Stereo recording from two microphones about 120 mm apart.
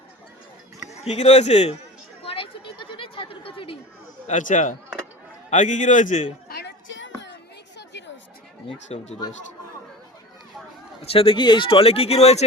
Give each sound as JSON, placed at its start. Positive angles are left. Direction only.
{"t": 1.0, "sound": "speech", "side_deg": 60}
{"t": 2.2, "sound": "chatter", "side_deg": 50}
{"t": 4.3, "sound": "a man's voice", "side_deg": 90}
{"t": 8.6, "sound": "speech", "side_deg": 60}
{"t": 11.0, "sound": "speech", "side_deg": 50}